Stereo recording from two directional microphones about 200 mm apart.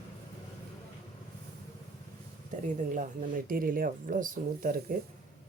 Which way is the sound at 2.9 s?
45° right (ahead or behind).